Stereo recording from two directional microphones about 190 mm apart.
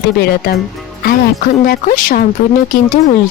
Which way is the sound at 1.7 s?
45° left (ahead or behind).